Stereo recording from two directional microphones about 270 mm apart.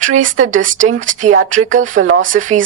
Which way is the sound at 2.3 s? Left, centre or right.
Right.